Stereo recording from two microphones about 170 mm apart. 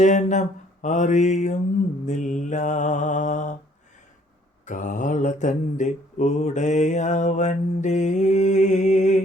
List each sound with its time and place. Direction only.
0.0 s mantra: 45° left (ahead or behind)
4.6 s mantra: 50° left (ahead or behind)